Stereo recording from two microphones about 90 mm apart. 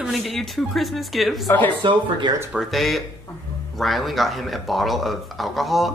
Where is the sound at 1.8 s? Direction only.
60° right (ahead or behind).